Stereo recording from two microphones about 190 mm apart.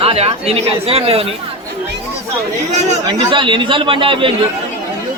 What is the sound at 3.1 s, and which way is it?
A man's voice, 25° right (ahead or behind).